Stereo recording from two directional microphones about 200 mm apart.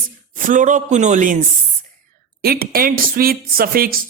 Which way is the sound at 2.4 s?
50° right (ahead or behind).